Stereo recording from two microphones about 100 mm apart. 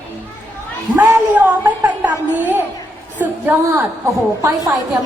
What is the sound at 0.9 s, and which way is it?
A woman's voice, 20° right (ahead or behind).